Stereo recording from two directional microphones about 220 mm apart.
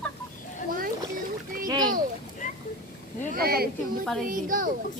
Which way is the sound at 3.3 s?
45° right (ahead or behind).